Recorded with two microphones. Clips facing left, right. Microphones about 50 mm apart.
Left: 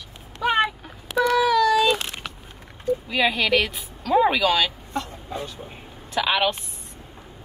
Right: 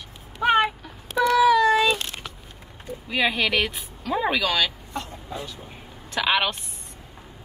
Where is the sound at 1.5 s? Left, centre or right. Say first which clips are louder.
Even; right.